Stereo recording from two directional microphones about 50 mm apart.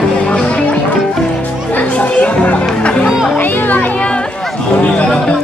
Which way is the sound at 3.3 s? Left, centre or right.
Left.